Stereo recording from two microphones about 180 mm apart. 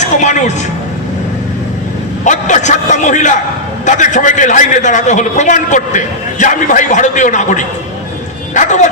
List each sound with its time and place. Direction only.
0.0 s a woman's voice: 40° left (ahead or behind)
2.2 s a man's voice: 45° left (ahead or behind)